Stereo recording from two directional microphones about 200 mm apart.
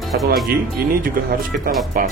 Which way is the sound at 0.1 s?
55° right (ahead or behind).